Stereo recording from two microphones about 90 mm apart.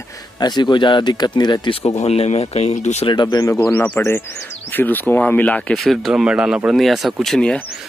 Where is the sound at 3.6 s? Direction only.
25° left (ahead or behind).